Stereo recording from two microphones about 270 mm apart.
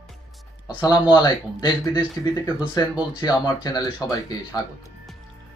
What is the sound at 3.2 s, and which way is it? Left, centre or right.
Speech, centre.